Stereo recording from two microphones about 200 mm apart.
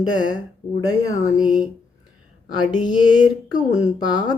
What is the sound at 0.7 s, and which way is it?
Speech, 15° left (ahead or behind).